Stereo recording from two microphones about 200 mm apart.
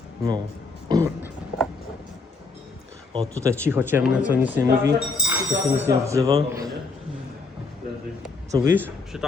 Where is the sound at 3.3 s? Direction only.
15° right (ahead or behind).